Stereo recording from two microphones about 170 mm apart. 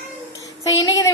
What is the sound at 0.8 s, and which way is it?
Speech, 20° left (ahead or behind).